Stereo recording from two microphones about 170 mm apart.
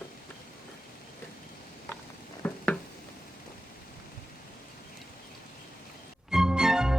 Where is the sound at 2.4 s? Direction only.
10° left (ahead or behind).